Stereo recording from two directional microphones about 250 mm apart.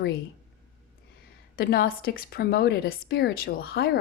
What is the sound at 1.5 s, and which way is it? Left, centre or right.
Speech, left.